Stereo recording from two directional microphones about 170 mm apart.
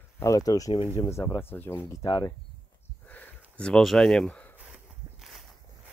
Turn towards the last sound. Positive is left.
turn(degrees=0)  # may be behind; listen again after turning